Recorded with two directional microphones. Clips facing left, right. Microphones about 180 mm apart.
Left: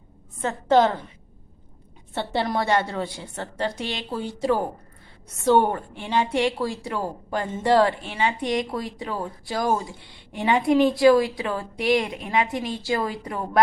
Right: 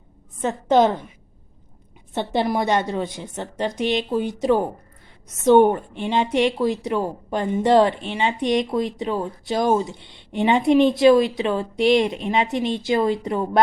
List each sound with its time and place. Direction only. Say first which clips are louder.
0.4 s a woman's voice: right 2 dB; 15° right (ahead or behind)
2.1 s a woman's voice: right 3 dB; 15° right (ahead or behind)